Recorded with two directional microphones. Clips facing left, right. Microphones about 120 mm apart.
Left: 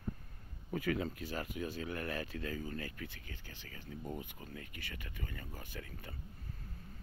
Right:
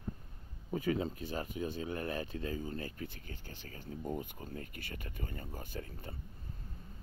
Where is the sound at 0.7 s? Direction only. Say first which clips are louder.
Right 2 dB; 25° right (ahead or behind).